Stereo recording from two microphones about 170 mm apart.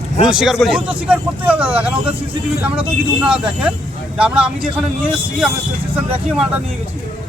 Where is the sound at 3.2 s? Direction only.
5° right (ahead or behind).